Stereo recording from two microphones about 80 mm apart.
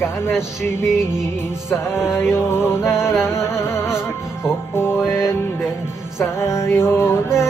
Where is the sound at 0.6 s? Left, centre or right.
Left.